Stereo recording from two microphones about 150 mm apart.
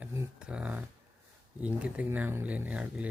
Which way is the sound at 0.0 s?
20° right (ahead or behind).